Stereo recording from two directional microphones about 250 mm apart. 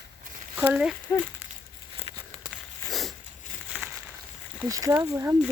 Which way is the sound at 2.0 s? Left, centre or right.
Left.